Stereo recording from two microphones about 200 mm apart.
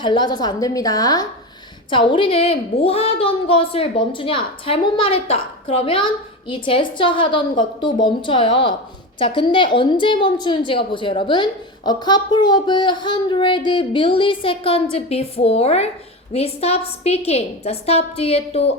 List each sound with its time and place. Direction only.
0.0 s a woman's voice: 20° left (ahead or behind)